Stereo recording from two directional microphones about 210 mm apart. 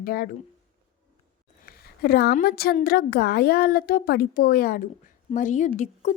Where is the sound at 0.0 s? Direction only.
45° left (ahead or behind).